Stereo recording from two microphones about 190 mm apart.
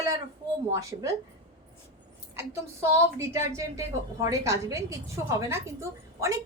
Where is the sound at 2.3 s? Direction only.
15° right (ahead or behind).